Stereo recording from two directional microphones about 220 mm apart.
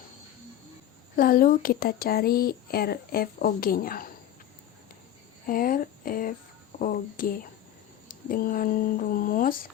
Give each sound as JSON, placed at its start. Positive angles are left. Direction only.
{"t": 1.1, "sound": "speech", "side_deg": 40}
{"t": 5.5, "sound": "speech", "side_deg": 40}